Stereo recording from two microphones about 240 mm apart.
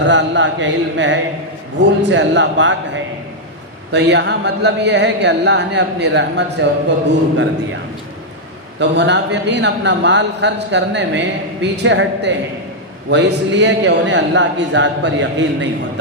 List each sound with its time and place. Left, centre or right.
0.0 s a man's voice: right
8.8 s a man's voice: right